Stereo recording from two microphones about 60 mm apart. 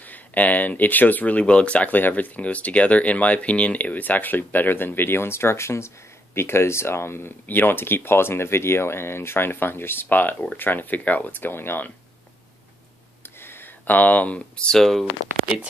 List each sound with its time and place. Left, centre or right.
0.1 s speech: left
13.4 s a sound: left
14.7 s speech: centre